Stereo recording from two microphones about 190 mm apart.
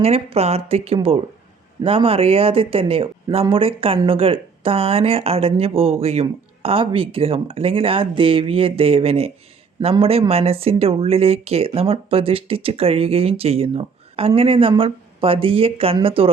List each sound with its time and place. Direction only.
0.0 s speech: 30° right (ahead or behind)